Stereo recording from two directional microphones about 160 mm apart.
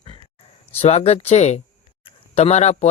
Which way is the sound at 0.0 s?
30° left (ahead or behind).